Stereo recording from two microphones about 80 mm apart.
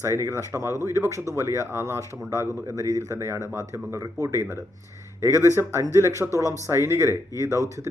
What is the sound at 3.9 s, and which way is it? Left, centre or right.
Speech, right.